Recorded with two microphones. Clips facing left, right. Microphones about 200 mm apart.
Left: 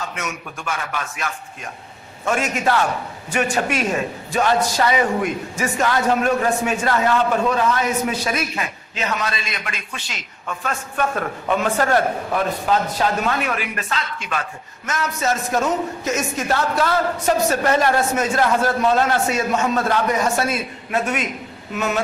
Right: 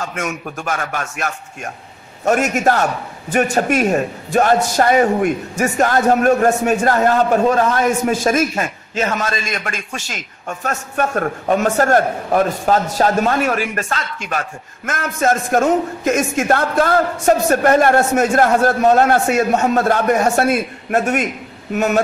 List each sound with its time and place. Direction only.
0.0 s a man's voice: 50° right (ahead or behind)